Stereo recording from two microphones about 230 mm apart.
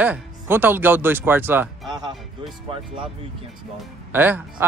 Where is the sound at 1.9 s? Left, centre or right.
Centre.